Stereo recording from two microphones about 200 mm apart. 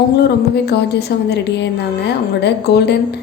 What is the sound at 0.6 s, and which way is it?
A woman's voice, 55° left (ahead or behind).